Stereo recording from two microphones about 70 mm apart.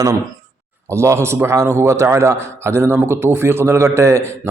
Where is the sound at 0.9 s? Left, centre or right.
Right.